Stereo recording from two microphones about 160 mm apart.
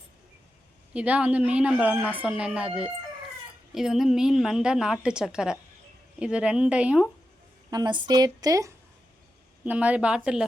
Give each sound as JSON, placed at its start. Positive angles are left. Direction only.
{"t": 0.9, "sound": "a woman's voice", "side_deg": -10}
{"t": 7.7, "sound": "a woman's voice", "side_deg": -25}
{"t": 9.6, "sound": "a woman's voice", "side_deg": -10}